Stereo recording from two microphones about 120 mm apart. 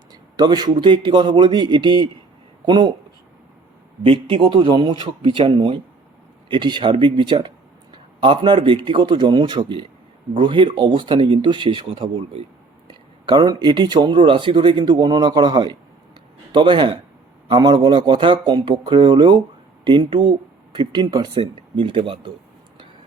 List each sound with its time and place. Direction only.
0.1 s speech: 35° right (ahead or behind)
4.0 s speech: 45° right (ahead or behind)
13.2 s speech: 35° right (ahead or behind)